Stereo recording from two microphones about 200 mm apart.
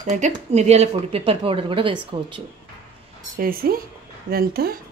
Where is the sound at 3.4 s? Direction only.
45° right (ahead or behind).